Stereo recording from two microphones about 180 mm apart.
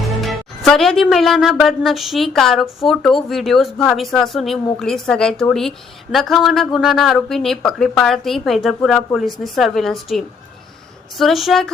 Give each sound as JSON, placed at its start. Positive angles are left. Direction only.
{"t": 0.2, "sound": "a woman's voice", "side_deg": 0}